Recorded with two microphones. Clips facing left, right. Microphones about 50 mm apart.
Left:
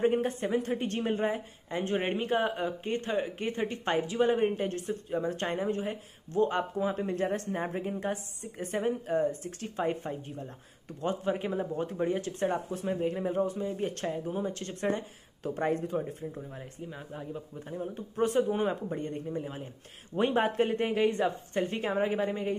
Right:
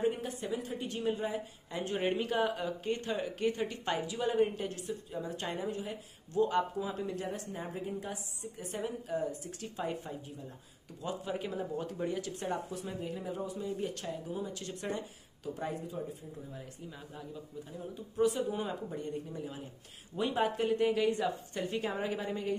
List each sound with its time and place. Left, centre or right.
0.0 s a woman's voice: left
15.5 s speech: left
16.3 s a woman's voice: left
17.6 s a woman's voice: left